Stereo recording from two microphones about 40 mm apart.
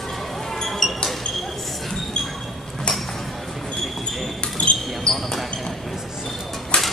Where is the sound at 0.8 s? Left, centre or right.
Centre.